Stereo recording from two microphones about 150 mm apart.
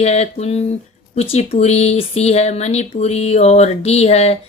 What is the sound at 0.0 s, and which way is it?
A woman's voice, 45° left (ahead or behind).